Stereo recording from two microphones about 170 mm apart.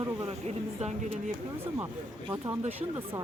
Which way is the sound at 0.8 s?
40° right (ahead or behind).